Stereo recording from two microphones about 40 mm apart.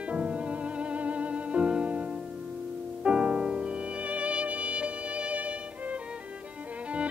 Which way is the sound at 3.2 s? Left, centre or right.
Right.